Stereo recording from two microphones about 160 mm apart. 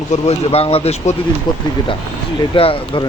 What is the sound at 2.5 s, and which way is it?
Speech, 35° left (ahead or behind).